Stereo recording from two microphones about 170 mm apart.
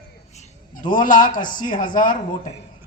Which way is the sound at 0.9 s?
50° left (ahead or behind).